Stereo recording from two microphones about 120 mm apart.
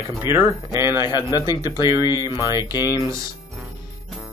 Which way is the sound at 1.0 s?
35° left (ahead or behind).